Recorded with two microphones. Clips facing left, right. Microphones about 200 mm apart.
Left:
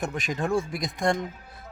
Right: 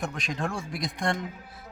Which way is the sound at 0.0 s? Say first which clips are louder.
Left 3 dB; centre (ahead or behind).